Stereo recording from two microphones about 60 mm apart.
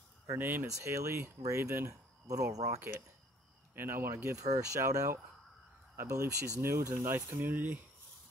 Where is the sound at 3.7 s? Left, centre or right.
Right.